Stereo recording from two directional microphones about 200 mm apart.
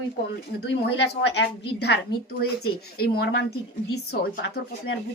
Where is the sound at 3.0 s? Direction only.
50° left (ahead or behind).